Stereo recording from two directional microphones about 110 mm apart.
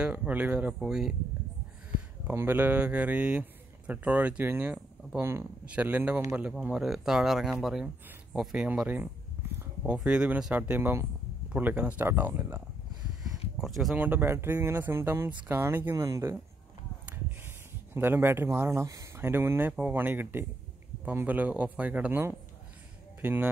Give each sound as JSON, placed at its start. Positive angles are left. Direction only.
{"t": 0.0, "sound": "speech", "side_deg": -15}
{"t": 2.2, "sound": "speech", "side_deg": -20}
{"t": 8.6, "sound": "speech", "side_deg": -15}
{"t": 13.6, "sound": "speech", "side_deg": 0}
{"t": 13.9, "sound": "speech", "side_deg": -15}
{"t": 17.9, "sound": "speech", "side_deg": -20}